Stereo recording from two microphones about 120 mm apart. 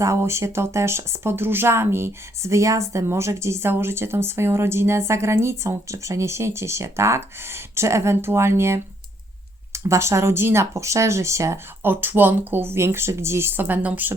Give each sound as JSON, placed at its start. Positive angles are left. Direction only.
{"t": 0.0, "sound": "speech", "side_deg": -25}